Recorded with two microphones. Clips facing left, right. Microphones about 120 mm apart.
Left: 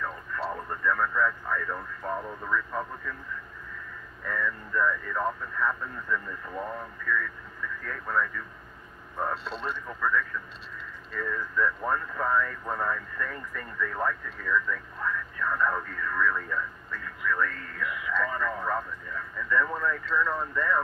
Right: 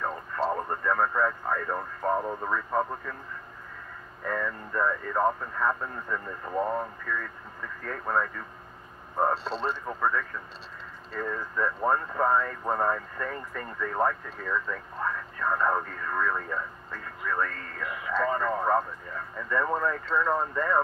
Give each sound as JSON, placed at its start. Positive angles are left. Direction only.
{"t": 0.0, "sound": "speech", "side_deg": -40}
{"t": 4.2, "sound": "speech", "side_deg": -45}